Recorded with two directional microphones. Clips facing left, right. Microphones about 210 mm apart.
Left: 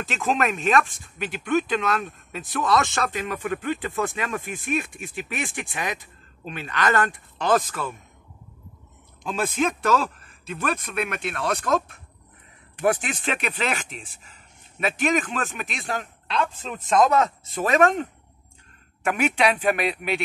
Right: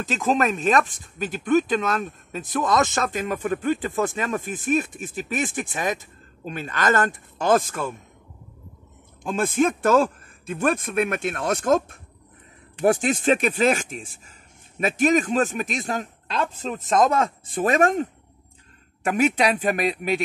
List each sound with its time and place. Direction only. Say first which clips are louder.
0.1 s a man's voice: right 3 dB; 40° right (ahead or behind)
9.2 s a man's voice: right 3 dB; 50° right (ahead or behind)
19.0 s speech: right 2 dB; 40° right (ahead or behind)